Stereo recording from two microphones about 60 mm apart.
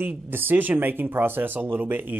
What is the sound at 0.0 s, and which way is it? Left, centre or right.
Speech, right.